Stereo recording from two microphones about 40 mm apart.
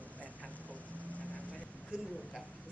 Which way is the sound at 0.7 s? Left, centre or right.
Left.